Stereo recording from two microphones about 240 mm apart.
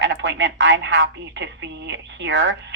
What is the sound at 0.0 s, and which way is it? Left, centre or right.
A woman's voice, right.